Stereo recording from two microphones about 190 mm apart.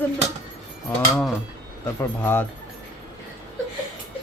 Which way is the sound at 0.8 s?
Centre (ahead or behind).